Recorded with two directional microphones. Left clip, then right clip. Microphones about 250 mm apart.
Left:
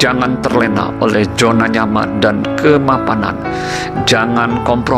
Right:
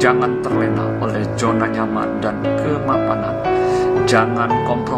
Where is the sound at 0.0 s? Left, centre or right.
Left.